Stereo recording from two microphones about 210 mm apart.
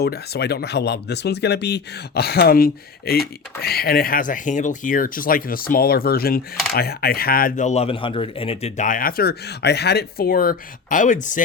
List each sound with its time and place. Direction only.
0.0 s speech: 50° left (ahead or behind)